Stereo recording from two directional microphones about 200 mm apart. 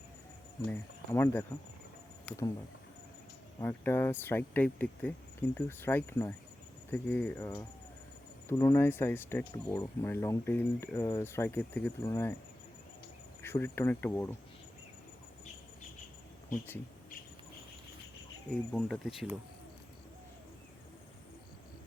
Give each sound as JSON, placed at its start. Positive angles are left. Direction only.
{"t": 0.7, "sound": "speech", "side_deg": 10}
{"t": 3.6, "sound": "speech", "side_deg": 10}
{"t": 8.5, "sound": "speech", "side_deg": 15}
{"t": 13.4, "sound": "speech", "side_deg": 10}
{"t": 18.7, "sound": "speech", "side_deg": 0}